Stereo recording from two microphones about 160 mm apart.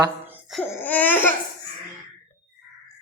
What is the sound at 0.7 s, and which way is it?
Laughter, 10° left (ahead or behind).